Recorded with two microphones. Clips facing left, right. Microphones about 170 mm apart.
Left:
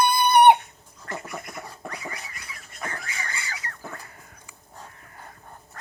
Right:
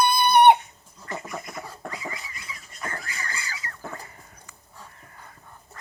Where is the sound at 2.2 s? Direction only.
55° left (ahead or behind).